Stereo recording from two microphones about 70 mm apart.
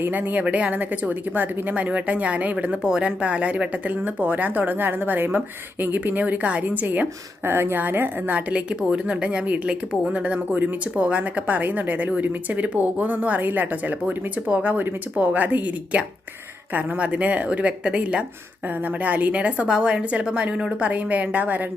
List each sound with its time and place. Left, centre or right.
0.0 s a woman's voice: right
7.4 s a woman's voice: right